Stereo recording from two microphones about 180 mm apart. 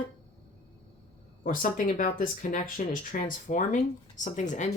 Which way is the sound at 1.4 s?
50° left (ahead or behind).